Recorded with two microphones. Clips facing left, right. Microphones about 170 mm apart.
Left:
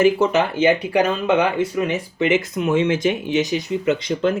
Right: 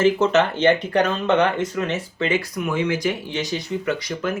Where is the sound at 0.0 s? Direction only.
10° left (ahead or behind).